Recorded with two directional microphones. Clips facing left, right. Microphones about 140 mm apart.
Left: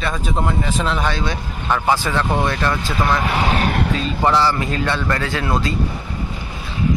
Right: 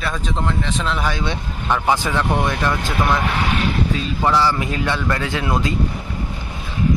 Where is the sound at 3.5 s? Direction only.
40° left (ahead or behind).